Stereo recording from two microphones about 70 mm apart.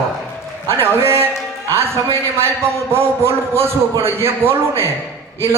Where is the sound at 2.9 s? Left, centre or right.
Right.